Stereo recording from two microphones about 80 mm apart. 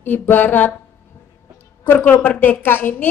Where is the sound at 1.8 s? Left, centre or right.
Left.